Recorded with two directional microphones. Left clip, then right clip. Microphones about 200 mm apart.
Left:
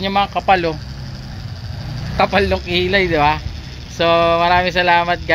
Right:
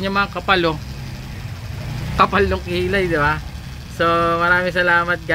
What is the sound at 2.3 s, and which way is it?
Speech, 5° left (ahead or behind).